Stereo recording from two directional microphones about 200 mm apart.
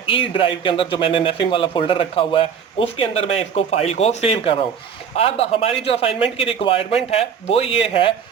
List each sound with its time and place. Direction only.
0.0 s speech: 25° left (ahead or behind)